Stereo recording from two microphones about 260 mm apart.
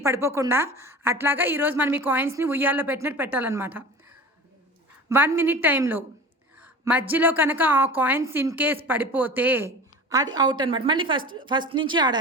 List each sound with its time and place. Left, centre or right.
0.0 s speech: centre
5.0 s speech: centre
6.6 s a sound: centre
7.1 s speech: centre